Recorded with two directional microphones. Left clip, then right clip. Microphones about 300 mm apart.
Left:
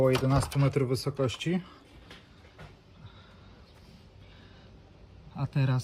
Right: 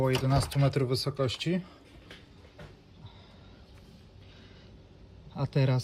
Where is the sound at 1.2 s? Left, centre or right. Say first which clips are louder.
Even; centre.